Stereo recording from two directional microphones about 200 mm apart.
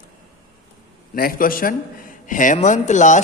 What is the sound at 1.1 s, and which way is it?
A man's voice, 45° left (ahead or behind).